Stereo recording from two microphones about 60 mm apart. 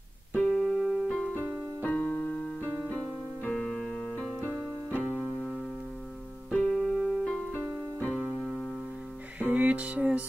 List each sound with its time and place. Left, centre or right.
0.3 s keyboard: centre
1.3 s keyboard: left
3.5 s keyboard: centre
6.5 s keyboard: centre
7.5 s keyboard: left
9.4 s music: right